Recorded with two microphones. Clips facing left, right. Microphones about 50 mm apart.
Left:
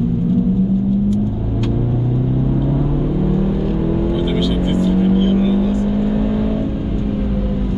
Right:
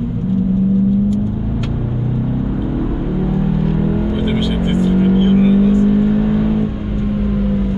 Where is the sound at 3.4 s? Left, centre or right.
Centre.